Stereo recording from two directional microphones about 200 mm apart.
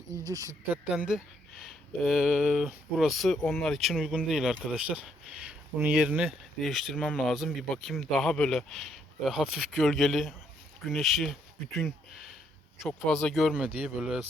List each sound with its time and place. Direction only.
0.2 s speech: 15° right (ahead or behind)
0.9 s speech: 5° right (ahead or behind)